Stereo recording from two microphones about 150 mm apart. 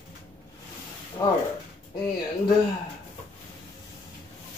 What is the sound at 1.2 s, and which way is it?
Speech, 25° left (ahead or behind).